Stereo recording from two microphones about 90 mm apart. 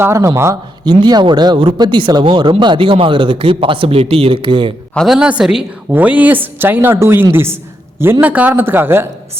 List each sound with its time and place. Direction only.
0.0 s speech: 30° right (ahead or behind)
0.9 s speech: 55° right (ahead or behind)
1.5 s speech: 65° right (ahead or behind)
5.0 s a woman's voice: 5° right (ahead or behind)
5.9 s a woman's voice: 20° right (ahead or behind)
8.2 s a woman's voice: 20° right (ahead or behind)